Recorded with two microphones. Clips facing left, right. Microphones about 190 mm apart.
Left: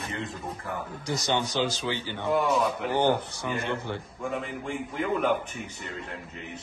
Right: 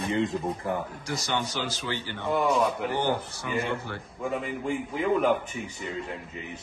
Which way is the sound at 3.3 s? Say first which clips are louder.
Right 1 dB; 20° left (ahead or behind).